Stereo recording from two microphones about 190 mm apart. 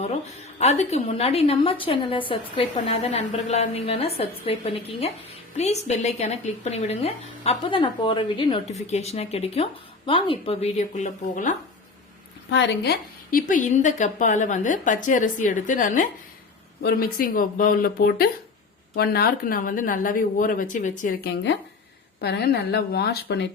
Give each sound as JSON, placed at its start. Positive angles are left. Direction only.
{"t": 0.6, "sound": "a woman's voice", "side_deg": 35}
{"t": 12.5, "sound": "a woman's voice", "side_deg": 65}